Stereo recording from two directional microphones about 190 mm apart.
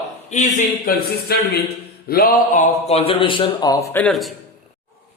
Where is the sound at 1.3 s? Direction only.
60° left (ahead or behind); by 3.7 s 25° left (ahead or behind).